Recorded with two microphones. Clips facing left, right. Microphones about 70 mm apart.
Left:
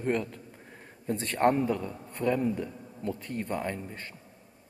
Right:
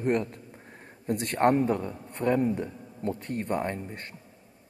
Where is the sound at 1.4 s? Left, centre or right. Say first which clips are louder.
Right 2 dB; right.